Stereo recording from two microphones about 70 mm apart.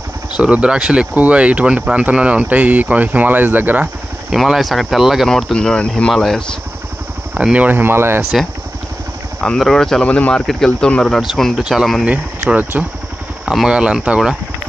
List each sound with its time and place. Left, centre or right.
0.4 s speech: centre
4.3 s speech: centre
5.3 s speech: centre
7.3 s speech: centre; by 8.2 s right
8.2 s speech: centre
9.6 s speech: centre
10.0 s speech: centre
10.4 s speech: centre
12.0 s speech: centre
13.5 s speech: centre